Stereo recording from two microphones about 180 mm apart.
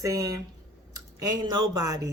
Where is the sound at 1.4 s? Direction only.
20° right (ahead or behind).